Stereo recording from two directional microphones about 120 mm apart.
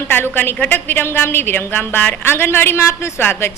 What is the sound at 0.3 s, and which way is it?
A woman's voice, 15° left (ahead or behind).